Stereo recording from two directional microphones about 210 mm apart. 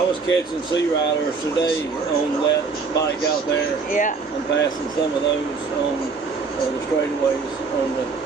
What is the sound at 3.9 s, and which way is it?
Speech, 40° left (ahead or behind).